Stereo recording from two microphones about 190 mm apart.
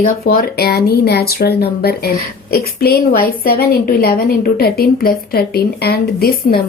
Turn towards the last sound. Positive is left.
turn(degrees=55)  # may be behind; listen again after turning